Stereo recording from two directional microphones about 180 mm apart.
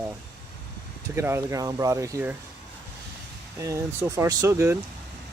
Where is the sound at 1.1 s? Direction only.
15° right (ahead or behind).